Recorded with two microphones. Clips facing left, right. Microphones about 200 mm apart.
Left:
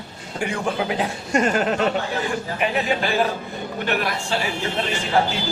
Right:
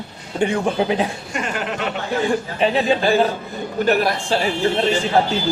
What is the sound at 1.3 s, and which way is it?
Speech, 40° left (ahead or behind).